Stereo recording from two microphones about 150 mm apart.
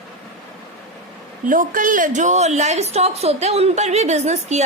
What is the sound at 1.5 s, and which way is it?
A woman's voice, 60° right (ahead or behind).